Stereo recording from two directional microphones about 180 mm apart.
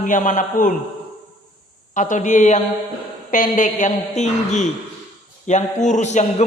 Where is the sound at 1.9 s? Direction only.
45° left (ahead or behind).